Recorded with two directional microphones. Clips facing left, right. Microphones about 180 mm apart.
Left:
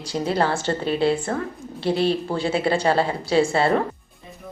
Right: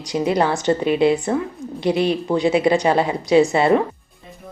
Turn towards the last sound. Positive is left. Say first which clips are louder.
# right 4 dB
turn(degrees=-20)  # may be behind; listen again after turning